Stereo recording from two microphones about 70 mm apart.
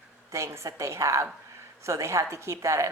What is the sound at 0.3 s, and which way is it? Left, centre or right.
Speech, right.